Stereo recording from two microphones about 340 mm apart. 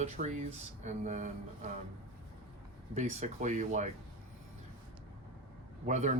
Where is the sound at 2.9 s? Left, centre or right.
Centre.